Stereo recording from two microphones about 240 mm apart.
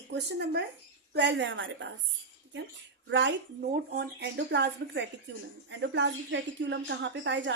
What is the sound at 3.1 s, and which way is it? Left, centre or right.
Speech, right.